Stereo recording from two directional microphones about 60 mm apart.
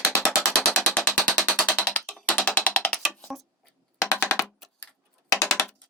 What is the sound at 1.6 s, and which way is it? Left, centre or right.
Music, left.